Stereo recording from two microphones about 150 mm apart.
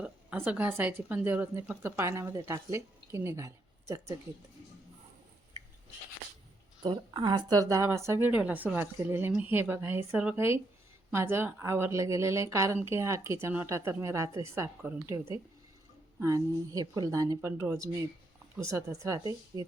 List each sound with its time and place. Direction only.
0.0 s speech: 10° right (ahead or behind)
6.8 s a woman's voice: 30° right (ahead or behind); by 14.9 s 15° right (ahead or behind)
16.2 s a woman's voice: 25° right (ahead or behind)